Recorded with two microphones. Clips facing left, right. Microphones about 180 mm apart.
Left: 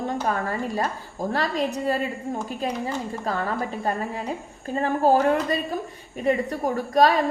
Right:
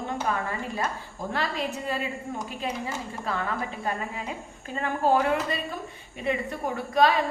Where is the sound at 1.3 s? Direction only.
40° left (ahead or behind).